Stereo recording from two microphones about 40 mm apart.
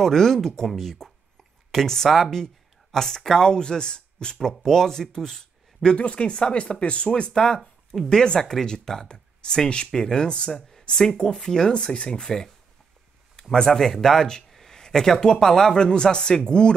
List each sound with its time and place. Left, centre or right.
0.0 s speech: centre
4.4 s speech: centre
5.9 s speech: left; by 11.7 s centre
11.7 s speech: left
12.2 s speech: centre